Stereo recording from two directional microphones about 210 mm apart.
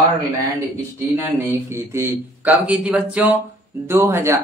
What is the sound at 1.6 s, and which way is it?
Speech, 10° right (ahead or behind).